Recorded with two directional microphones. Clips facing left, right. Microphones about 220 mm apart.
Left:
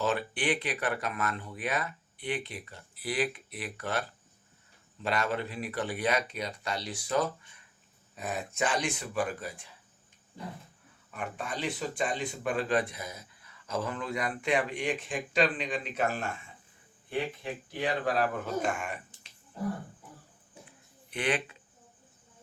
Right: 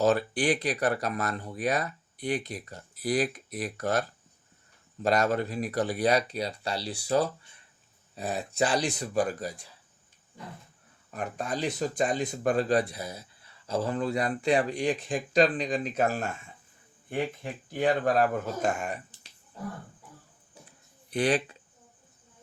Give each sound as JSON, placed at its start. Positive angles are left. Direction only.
{"t": 0.0, "sound": "speech", "side_deg": -40}
{"t": 5.0, "sound": "speech", "side_deg": -40}
{"t": 11.1, "sound": "speech", "side_deg": -40}
{"t": 21.1, "sound": "speech", "side_deg": -35}